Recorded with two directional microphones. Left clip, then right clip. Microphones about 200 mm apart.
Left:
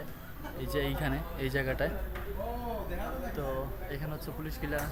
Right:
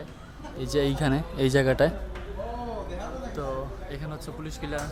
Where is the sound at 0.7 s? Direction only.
45° right (ahead or behind).